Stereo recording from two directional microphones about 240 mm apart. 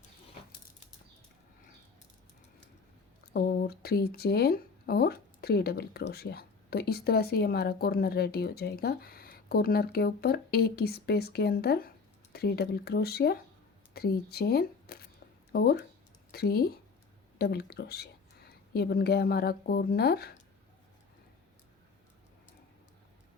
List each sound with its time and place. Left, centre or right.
3.3 s speech: left